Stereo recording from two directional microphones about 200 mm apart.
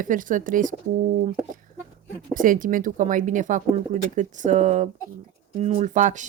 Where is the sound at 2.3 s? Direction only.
40° right (ahead or behind).